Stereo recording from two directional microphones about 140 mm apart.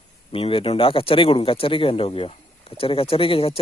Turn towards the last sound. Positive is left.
turn(degrees=40)  # may be behind; listen again after turning